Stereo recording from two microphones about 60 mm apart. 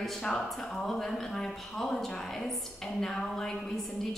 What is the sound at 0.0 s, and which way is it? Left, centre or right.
A woman's voice, centre.